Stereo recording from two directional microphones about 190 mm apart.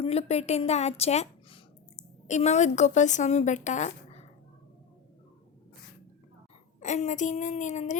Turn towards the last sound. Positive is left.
turn(degrees=40)  # may be behind; listen again after turning